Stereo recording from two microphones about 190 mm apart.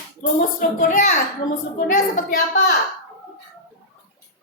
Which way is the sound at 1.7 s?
45° left (ahead or behind).